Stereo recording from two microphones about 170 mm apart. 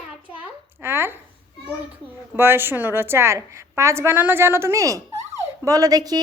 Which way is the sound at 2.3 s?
10° right (ahead or behind).